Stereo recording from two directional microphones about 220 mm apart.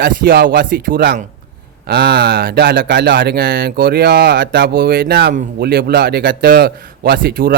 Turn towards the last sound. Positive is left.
turn(degrees=-40)  # may be behind; listen again after turning